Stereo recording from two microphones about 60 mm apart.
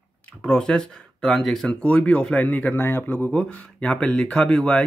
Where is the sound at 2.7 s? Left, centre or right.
Left.